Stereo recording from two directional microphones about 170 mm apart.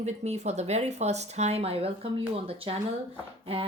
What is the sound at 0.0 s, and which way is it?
Speech, 40° right (ahead or behind).